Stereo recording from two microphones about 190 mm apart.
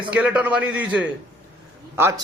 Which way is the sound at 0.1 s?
5° right (ahead or behind).